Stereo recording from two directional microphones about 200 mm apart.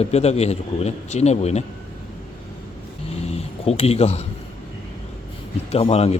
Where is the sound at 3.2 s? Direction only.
30° left (ahead or behind).